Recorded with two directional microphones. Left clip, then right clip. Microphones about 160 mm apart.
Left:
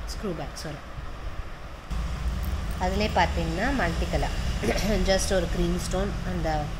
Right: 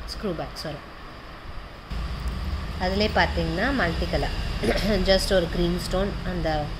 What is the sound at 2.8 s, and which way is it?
A woman's voice, 15° right (ahead or behind).